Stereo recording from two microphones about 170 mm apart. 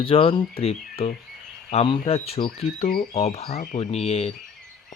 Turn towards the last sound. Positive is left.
turn(degrees=35)  # may be behind; listen again after turning